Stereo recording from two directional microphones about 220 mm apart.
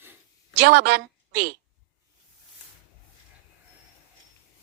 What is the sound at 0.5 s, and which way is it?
Speech, 50° right (ahead or behind).